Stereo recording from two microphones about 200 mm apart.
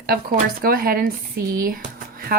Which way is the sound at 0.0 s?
50° right (ahead or behind).